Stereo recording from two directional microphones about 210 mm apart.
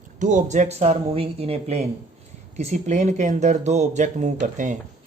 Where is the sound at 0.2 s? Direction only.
35° right (ahead or behind).